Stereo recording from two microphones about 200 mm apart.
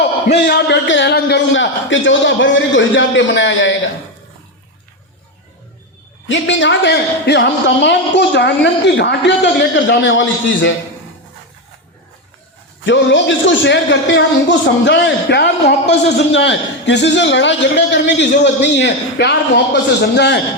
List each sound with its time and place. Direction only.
0.3 s a man's voice: 55° left (ahead or behind)
6.2 s a man's voice: 65° left (ahead or behind)
12.8 s a man's voice: 65° left (ahead or behind)